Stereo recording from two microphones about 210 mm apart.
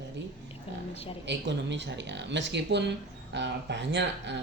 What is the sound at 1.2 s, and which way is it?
Speech, 55° right (ahead or behind).